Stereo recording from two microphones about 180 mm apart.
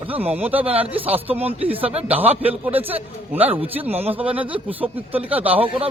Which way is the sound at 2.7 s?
10° right (ahead or behind).